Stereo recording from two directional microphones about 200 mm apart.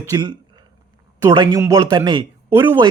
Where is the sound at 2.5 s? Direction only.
10° right (ahead or behind).